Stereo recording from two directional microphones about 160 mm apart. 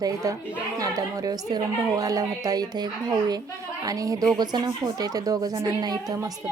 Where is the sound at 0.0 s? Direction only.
20° right (ahead or behind).